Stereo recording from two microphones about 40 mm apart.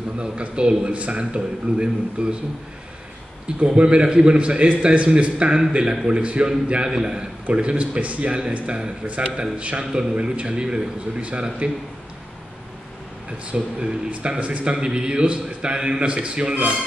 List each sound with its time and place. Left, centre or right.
0.2 s a man's voice: right
3.6 s a man's voice: right
13.5 s a man's voice: right